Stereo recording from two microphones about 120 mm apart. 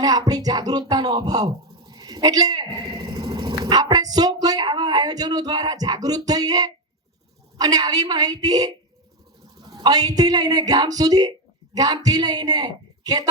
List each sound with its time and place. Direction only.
0.0 s music: 30° right (ahead or behind)
1.9 s speech: 35° right (ahead or behind)
7.6 s music: 30° right (ahead or behind)
9.6 s a woman's voice: 35° right (ahead or behind)